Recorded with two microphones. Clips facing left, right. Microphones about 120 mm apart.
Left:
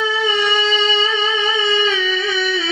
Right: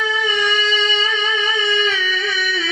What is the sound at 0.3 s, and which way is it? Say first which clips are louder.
Music: left 2 dB; 30° left (ahead or behind).